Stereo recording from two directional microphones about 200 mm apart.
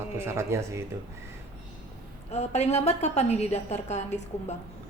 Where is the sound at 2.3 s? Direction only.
35° left (ahead or behind).